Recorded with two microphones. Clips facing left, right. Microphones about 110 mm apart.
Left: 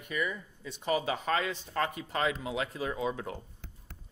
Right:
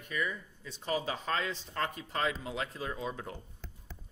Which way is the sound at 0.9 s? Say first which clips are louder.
Left 4 dB; 65° left (ahead or behind).